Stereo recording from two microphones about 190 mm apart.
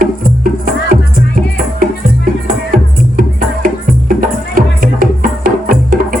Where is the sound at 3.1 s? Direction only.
50° right (ahead or behind).